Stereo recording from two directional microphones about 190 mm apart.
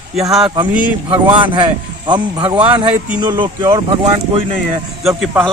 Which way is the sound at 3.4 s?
20° right (ahead or behind).